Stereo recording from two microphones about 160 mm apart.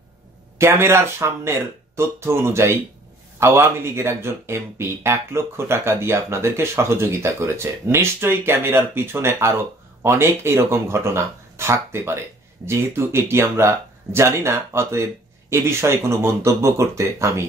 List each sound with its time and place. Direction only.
0.6 s speech: 15° right (ahead or behind)